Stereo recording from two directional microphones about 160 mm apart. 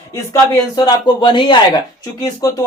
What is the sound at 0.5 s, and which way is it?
Speech, 25° left (ahead or behind).